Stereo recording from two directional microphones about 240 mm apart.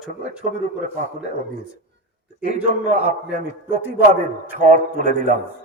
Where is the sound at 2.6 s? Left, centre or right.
Right.